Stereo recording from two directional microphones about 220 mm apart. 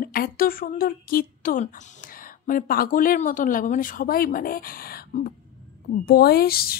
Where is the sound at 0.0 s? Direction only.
40° left (ahead or behind).